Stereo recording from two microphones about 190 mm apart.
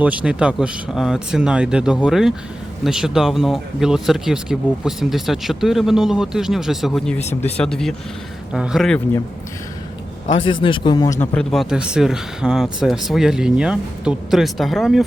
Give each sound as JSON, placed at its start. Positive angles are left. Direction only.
{"t": 0.0, "sound": "speech", "side_deg": -5}
{"t": 7.2, "sound": "speech", "side_deg": 35}
{"t": 7.5, "sound": "speech", "side_deg": 5}
{"t": 10.3, "sound": "a man's voice", "side_deg": 30}
{"t": 11.3, "sound": "speech", "side_deg": 0}